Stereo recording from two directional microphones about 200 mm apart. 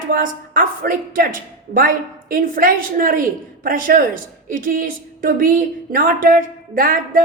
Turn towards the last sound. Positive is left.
turn(degrees=-45)  # may be behind; listen again after turning